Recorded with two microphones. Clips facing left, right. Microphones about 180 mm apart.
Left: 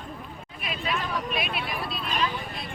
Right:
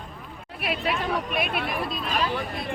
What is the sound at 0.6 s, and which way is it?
Speech, 65° right (ahead or behind).